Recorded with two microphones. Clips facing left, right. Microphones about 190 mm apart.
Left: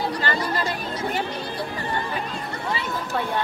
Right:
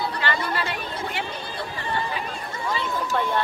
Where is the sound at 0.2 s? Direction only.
40° left (ahead or behind).